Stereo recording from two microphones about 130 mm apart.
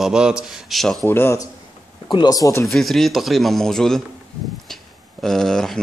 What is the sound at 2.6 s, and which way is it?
Speech, centre (ahead or behind).